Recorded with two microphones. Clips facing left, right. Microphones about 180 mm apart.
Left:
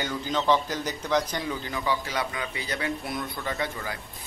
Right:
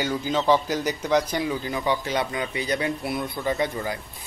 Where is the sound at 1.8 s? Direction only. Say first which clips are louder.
Right 3 dB; 25° right (ahead or behind).